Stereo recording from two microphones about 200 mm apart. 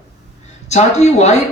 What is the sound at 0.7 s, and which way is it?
Speech, 35° left (ahead or behind).